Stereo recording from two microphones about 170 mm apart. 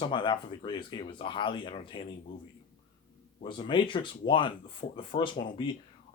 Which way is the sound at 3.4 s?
30° left (ahead or behind).